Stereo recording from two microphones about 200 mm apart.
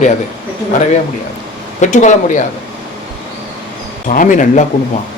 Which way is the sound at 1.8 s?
40° left (ahead or behind).